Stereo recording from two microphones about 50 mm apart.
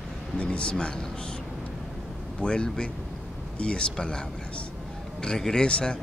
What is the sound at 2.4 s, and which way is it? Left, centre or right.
Speech, centre.